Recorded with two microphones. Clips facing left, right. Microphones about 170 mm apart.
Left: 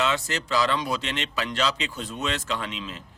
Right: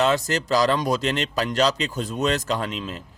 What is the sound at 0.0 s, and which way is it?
A man's voice, 40° right (ahead or behind).